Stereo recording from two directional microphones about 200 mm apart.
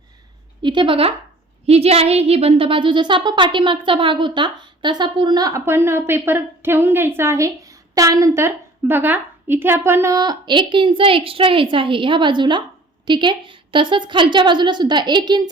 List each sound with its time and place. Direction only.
0.6 s speech: 25° right (ahead or behind)